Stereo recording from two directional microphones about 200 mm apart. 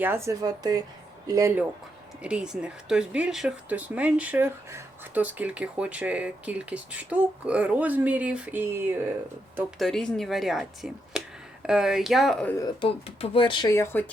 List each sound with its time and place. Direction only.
0.0 s speech: 10° right (ahead or behind)
2.2 s speech: 5° right (ahead or behind)
9.6 s speech: centre (ahead or behind)
12.5 s speech: 25° left (ahead or behind)